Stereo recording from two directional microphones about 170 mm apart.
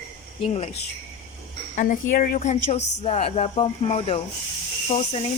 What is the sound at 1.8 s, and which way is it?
Speech, 55° left (ahead or behind).